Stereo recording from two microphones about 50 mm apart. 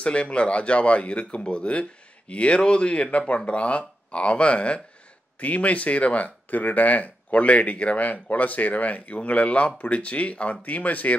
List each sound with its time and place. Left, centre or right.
0.0 s speech: left